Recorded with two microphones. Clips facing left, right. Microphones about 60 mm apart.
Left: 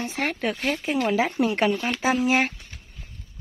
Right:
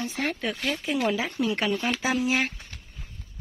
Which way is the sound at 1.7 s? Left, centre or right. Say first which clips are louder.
Even; centre.